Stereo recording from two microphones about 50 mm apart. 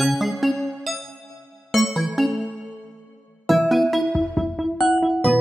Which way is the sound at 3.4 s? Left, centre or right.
Centre.